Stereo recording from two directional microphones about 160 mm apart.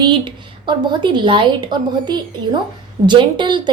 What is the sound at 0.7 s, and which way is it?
A woman's voice, 30° right (ahead or behind).